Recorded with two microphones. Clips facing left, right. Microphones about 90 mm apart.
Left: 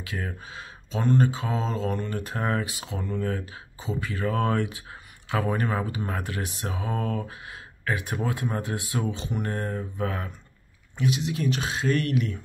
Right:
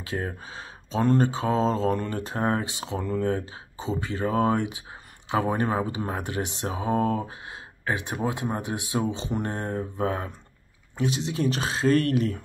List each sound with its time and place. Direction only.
0.0 s speech: 30° right (ahead or behind)
3.0 s speech: 40° right (ahead or behind)